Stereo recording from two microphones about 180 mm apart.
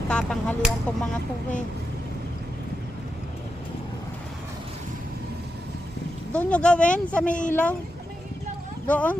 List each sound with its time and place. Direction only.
0.1 s speech: 5° left (ahead or behind)
6.3 s speech: 5° left (ahead or behind)
7.3 s speech: 45° left (ahead or behind)
7.5 s speech: 10° left (ahead or behind)
8.9 s speech: 10° left (ahead or behind)